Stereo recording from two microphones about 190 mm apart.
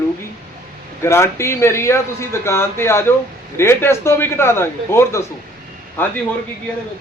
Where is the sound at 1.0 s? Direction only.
15° left (ahead or behind).